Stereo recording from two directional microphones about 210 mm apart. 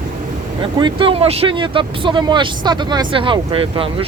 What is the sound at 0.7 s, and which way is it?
Speech, 20° right (ahead or behind).